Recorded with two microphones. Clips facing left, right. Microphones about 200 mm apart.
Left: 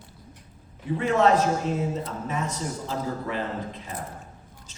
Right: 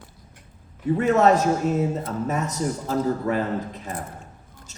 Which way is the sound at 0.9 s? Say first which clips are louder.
Right 3 dB; 45° right (ahead or behind).